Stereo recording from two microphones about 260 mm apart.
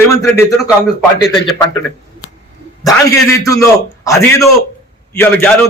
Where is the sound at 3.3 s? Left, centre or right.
Centre.